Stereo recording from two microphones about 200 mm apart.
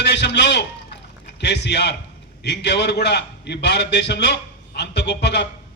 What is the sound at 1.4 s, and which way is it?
A man's voice, 60° left (ahead or behind).